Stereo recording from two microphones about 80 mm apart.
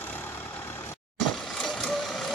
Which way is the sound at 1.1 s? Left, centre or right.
Centre.